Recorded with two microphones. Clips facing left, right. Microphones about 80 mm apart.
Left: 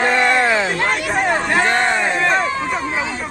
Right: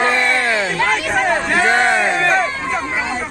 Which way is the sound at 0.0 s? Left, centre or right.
Centre.